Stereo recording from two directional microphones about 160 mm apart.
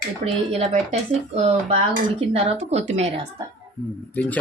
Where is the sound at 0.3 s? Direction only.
45° right (ahead or behind).